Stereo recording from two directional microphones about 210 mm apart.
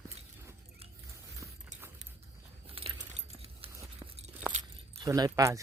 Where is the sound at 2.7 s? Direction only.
25° right (ahead or behind).